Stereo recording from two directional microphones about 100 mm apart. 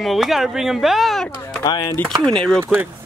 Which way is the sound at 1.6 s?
45° left (ahead or behind).